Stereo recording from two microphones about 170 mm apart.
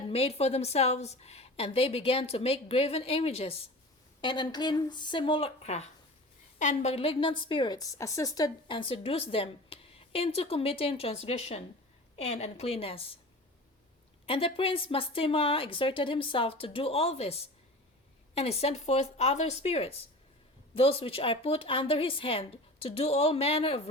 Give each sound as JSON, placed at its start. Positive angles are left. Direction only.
{"t": 0.1, "sound": "a woman's voice", "side_deg": 35}
{"t": 14.3, "sound": "a woman's voice", "side_deg": 30}